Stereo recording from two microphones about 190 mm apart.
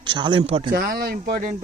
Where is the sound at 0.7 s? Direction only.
50° right (ahead or behind).